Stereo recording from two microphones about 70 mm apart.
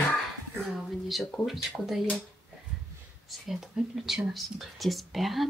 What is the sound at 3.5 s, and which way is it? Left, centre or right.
Speech, centre.